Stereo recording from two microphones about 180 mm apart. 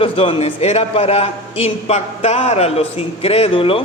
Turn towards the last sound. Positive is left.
turn(degrees=30)  # may be behind; listen again after turning